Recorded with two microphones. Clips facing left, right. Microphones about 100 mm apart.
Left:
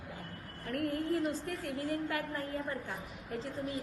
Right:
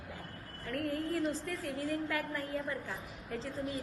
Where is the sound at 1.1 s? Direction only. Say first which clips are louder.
Left 1 dB; 25° left (ahead or behind).